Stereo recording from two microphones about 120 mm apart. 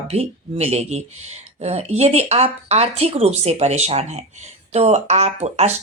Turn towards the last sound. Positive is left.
turn(degrees=-65)  # may be behind; listen again after turning